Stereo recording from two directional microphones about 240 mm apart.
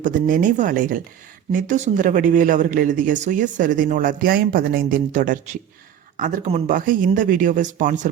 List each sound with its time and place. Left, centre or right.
0.0 s speech: right